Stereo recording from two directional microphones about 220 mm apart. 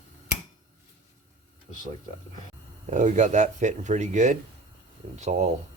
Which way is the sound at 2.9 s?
35° right (ahead or behind).